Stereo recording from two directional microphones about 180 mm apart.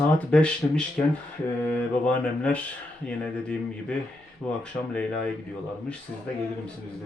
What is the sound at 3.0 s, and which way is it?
Speech, 5° left (ahead or behind).